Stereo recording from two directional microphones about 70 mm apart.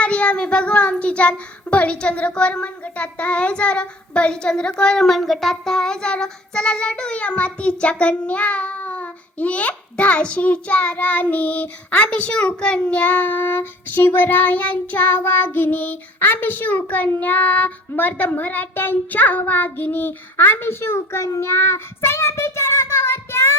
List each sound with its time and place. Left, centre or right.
0.0 s child singing: centre; by 23.6 s left